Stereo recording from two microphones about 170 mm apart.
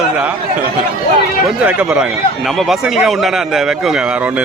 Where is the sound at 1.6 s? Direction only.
5° right (ahead or behind).